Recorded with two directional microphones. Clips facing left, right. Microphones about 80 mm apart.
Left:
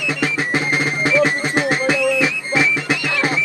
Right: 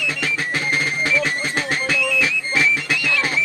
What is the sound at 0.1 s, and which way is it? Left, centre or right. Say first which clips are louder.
Music: left 9 dB; left.